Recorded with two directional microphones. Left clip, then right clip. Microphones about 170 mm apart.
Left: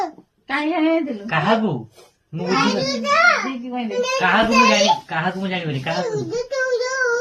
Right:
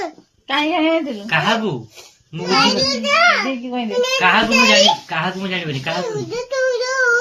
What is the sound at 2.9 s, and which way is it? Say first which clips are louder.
Speech: right 1 dB; 25° right (ahead or behind).